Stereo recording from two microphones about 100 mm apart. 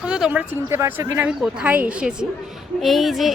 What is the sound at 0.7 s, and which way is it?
Speech, 25° right (ahead or behind).